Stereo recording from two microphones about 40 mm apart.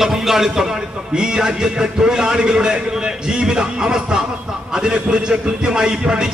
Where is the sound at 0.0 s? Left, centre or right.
Centre.